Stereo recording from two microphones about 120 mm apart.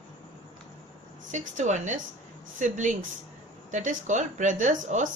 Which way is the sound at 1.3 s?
85° right.